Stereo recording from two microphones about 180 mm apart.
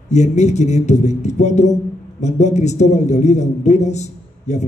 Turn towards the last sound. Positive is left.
turn(degrees=40)  # may be behind; listen again after turning